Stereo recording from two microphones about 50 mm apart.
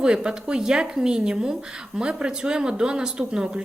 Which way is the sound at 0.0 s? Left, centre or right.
Centre.